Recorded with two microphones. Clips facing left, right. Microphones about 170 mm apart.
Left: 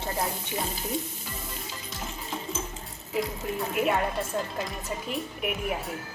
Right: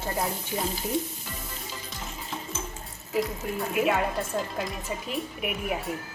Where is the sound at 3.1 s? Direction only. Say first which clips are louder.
Right 1 dB; centre (ahead or behind).